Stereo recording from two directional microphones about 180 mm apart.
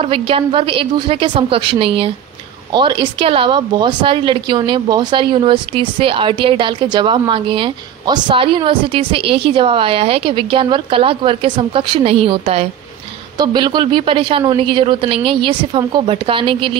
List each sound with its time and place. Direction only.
0.0 s speech: 30° right (ahead or behind)